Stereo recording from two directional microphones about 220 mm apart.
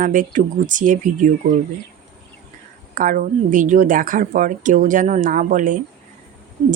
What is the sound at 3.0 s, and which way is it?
A woman's voice, 35° right (ahead or behind).